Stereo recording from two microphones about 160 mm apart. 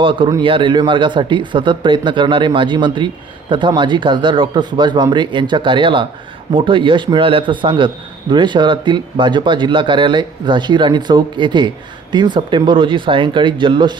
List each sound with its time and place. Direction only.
0.0 s a man's voice: 30° right (ahead or behind)